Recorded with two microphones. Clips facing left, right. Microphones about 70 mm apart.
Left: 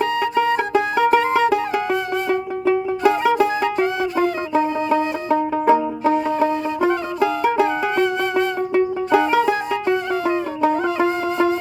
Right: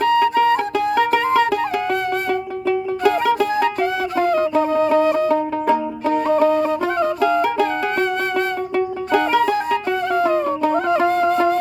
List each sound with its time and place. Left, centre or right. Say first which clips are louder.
0.0 s music: right 4 dB; centre
5.3 s banjo: left 1 dB; centre
6.8 s music: right 1 dB; centre